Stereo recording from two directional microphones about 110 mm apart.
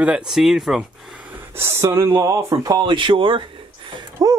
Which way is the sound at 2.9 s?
50° right (ahead or behind).